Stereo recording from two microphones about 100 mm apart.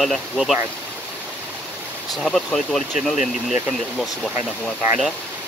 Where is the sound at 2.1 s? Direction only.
5° left (ahead or behind).